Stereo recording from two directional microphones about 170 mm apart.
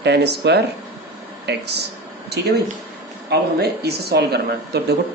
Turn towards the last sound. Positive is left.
turn(degrees=-75)  # may be behind; listen again after turning